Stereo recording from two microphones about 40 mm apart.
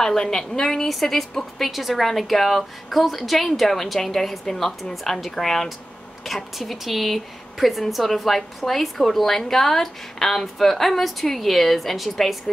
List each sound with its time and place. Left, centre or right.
0.0 s a woman's voice: centre